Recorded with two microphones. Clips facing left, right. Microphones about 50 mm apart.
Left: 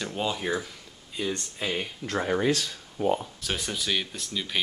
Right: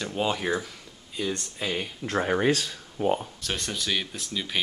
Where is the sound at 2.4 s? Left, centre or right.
Right.